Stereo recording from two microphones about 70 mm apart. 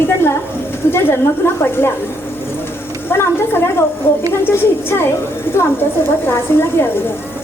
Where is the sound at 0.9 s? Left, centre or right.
Left.